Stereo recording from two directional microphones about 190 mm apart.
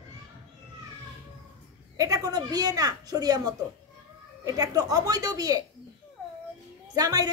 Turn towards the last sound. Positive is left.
turn(degrees=-20)  # may be behind; listen again after turning